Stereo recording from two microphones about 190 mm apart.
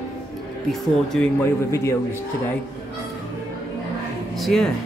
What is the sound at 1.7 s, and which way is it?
Speech, 15° left (ahead or behind).